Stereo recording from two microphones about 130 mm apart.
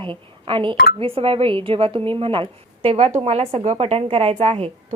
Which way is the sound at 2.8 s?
60° right (ahead or behind).